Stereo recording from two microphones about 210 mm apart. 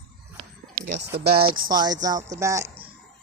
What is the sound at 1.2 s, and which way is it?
Speech, 30° right (ahead or behind).